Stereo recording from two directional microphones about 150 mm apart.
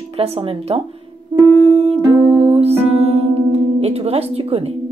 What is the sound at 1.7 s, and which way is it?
Music, 45° right (ahead or behind).